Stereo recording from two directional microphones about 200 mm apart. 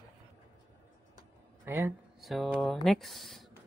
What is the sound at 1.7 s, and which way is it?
Speech, 10° right (ahead or behind).